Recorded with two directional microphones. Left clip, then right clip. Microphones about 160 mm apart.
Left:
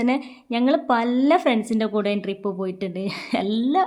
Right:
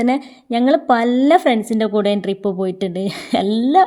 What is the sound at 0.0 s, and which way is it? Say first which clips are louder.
A woman's voice: right 5 dB; 30° right (ahead or behind).